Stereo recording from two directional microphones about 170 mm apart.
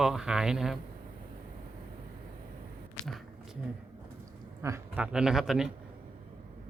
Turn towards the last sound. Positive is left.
turn(degrees=0)  # may be behind; listen again after turning